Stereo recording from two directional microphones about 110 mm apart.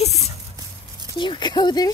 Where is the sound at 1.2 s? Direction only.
45° left (ahead or behind).